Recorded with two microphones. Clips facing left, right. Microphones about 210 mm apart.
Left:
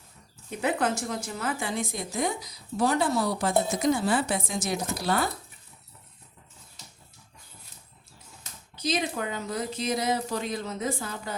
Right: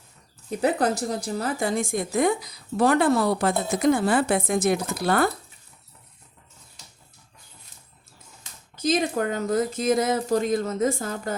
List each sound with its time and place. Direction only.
0.6 s a woman's voice: 35° right (ahead or behind); by 5.3 s 55° right (ahead or behind)
8.7 s speech: 45° right (ahead or behind)